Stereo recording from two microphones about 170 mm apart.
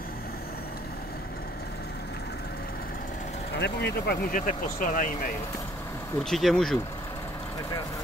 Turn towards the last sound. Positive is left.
turn(degrees=0)  # may be behind; listen again after turning